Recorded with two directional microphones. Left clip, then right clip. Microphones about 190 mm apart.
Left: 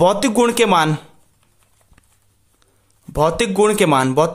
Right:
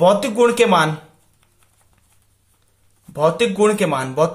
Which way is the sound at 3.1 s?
40° left (ahead or behind).